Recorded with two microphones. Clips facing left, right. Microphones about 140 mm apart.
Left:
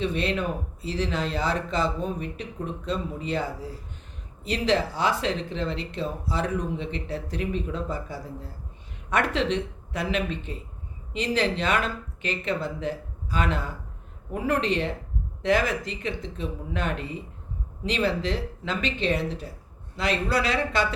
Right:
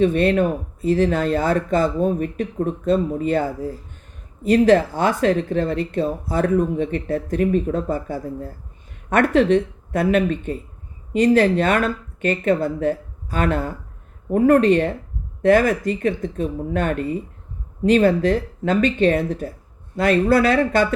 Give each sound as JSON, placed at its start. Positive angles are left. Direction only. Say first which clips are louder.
{"t": 0.0, "sound": "speech", "louder": "right 10 dB", "side_deg": -50}